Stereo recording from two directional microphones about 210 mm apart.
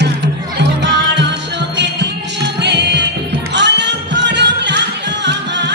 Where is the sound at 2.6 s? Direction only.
55° right (ahead or behind).